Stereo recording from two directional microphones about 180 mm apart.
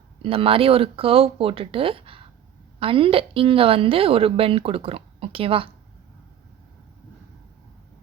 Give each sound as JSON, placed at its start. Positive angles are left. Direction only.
{"t": 0.2, "sound": "a woman's voice", "side_deg": -30}